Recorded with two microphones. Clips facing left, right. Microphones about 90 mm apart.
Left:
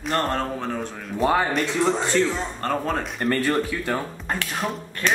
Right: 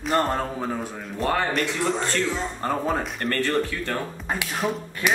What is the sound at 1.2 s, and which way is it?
Speech, 10° left (ahead or behind).